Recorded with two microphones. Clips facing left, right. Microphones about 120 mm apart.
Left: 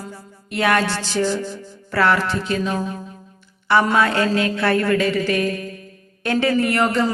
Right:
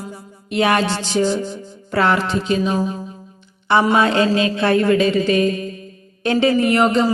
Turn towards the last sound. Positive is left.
turn(degrees=-20)  # may be behind; listen again after turning